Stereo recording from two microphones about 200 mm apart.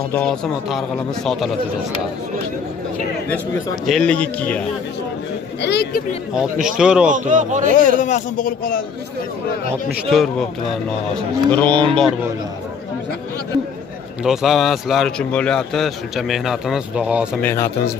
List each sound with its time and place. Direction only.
0.1 s a man's voice: 5° left (ahead or behind)
3.8 s a man's voice: 5° left (ahead or behind)
5.6 s speech: 55° left (ahead or behind)
6.6 s a man's voice: 5° right (ahead or behind)
7.1 s speech: 40° right (ahead or behind)
8.0 s speech: 40° left (ahead or behind)
10.0 s a man's voice: centre (ahead or behind)
14.2 s a man's voice: centre (ahead or behind)
17.4 s speech: 10° left (ahead or behind)